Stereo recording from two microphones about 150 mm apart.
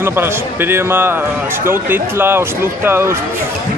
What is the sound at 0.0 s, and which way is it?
Speech, 15° right (ahead or behind).